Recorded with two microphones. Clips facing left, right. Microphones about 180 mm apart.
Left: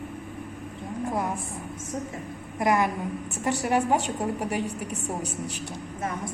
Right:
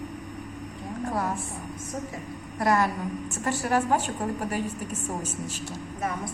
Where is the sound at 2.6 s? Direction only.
15° left (ahead or behind).